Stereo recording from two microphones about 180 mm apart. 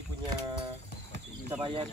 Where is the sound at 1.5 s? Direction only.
30° right (ahead or behind).